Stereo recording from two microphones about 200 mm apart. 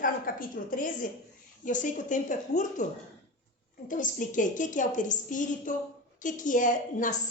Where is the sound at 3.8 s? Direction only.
40° left (ahead or behind).